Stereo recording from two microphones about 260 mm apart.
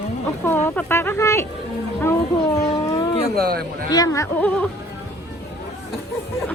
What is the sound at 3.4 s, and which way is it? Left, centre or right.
Speech, right.